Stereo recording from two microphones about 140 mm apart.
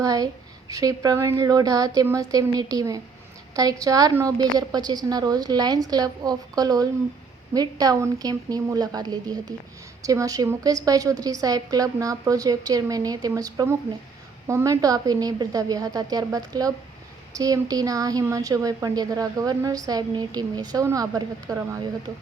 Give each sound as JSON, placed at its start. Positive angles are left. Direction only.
{"t": 0.0, "sound": "a woman's voice", "side_deg": -25}